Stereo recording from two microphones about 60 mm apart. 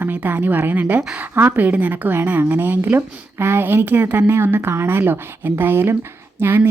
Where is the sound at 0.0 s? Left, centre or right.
Right.